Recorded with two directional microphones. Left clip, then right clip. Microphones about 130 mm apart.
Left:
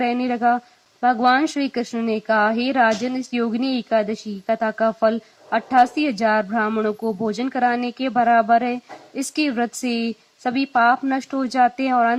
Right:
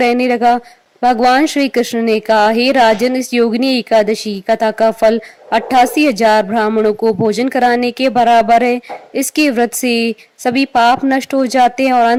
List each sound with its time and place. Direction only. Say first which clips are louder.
0.0 s speech: right 8 dB; 45° right (ahead or behind)